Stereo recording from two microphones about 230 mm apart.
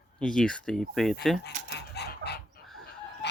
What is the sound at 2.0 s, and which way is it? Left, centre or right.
Chicken, left.